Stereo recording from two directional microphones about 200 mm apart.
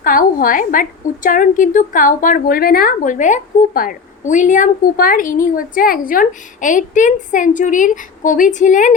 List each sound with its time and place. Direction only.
0.0 s a woman's voice: 45° left (ahead or behind)